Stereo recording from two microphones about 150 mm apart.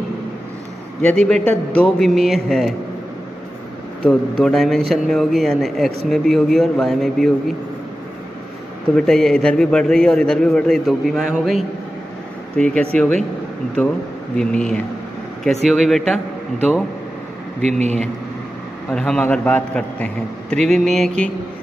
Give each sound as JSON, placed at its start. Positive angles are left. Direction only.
{"t": 1.0, "sound": "a man's voice", "side_deg": 5}
{"t": 4.0, "sound": "a man's voice", "side_deg": 5}
{"t": 8.9, "sound": "a man's voice", "side_deg": 5}
{"t": 14.3, "sound": "a man's voice", "side_deg": 5}
{"t": 17.6, "sound": "a man's voice", "side_deg": -50}
{"t": 18.9, "sound": "a man's voice", "side_deg": 5}